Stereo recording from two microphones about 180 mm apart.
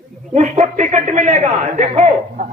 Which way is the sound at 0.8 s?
40° right (ahead or behind).